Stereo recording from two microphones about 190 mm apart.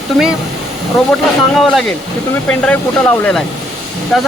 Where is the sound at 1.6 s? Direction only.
Centre (ahead or behind).